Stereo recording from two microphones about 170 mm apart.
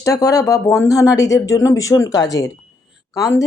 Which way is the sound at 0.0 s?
20° left (ahead or behind).